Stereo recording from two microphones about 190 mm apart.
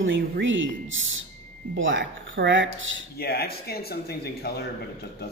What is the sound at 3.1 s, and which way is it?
A man's voice, 55° left (ahead or behind).